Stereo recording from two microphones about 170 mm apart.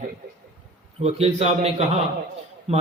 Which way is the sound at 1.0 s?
40° right (ahead or behind).